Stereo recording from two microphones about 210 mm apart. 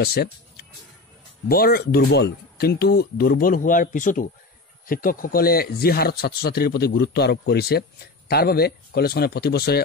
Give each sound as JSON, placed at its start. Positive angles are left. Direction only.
{"t": 0.0, "sound": "speech", "side_deg": 50}
{"t": 1.5, "sound": "speech", "side_deg": 45}